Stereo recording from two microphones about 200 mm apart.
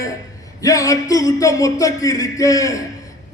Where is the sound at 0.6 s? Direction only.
15° left (ahead or behind).